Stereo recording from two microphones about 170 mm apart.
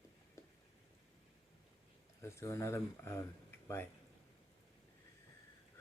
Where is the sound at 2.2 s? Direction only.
15° left (ahead or behind).